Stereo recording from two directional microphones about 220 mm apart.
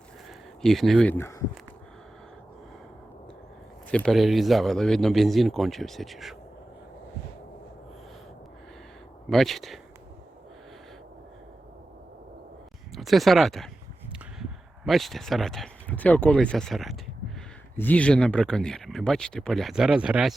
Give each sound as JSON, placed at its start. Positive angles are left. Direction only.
{"t": 0.6, "sound": "speech", "side_deg": 0}
{"t": 3.9, "sound": "speech", "side_deg": 0}
{"t": 9.3, "sound": "speech", "side_deg": 0}
{"t": 12.9, "sound": "speech", "side_deg": 0}
{"t": 14.8, "sound": "speech", "side_deg": 0}